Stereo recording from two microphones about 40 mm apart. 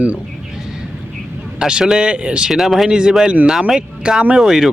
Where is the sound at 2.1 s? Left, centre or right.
Right.